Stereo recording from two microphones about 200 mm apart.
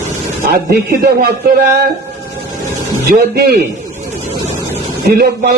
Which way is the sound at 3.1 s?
50° right (ahead or behind).